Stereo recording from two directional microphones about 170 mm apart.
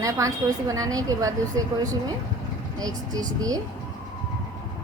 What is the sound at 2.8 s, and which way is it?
Speech, 20° right (ahead or behind).